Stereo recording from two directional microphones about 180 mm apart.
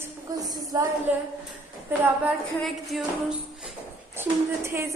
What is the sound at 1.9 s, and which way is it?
A woman's voice, 5° right (ahead or behind).